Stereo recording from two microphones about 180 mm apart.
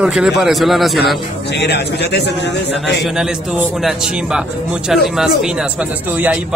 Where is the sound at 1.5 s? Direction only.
70° left (ahead or behind).